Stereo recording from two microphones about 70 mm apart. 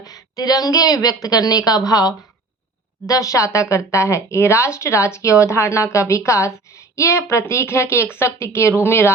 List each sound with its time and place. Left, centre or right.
0.0 s a woman's voice: left
3.1 s speech: left